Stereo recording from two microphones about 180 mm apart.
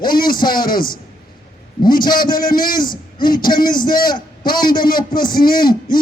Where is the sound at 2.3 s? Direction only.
50° left (ahead or behind).